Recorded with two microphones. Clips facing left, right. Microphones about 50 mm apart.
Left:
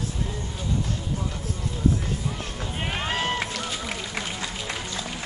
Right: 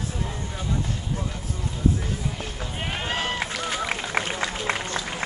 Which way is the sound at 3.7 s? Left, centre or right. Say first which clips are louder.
Right 5 dB; right.